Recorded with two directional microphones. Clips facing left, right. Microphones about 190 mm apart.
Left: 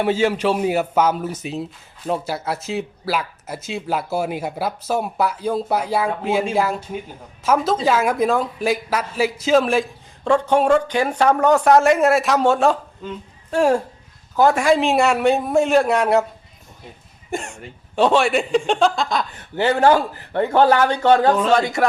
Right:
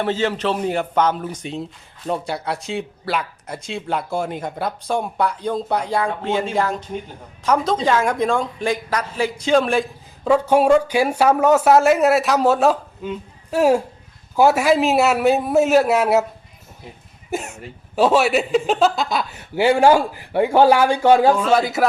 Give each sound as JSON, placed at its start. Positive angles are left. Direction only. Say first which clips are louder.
{"t": 0.0, "sound": "a man's voice", "louder": "left 2 dB", "side_deg": 10}
{"t": 17.3, "sound": "speech", "louder": "right 1 dB", "side_deg": -5}